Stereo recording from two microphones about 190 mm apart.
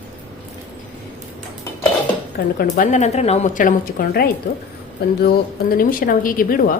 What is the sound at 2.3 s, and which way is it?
A woman's voice, 45° left (ahead or behind).